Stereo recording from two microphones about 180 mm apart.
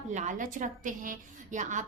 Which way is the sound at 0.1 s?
40° right (ahead or behind).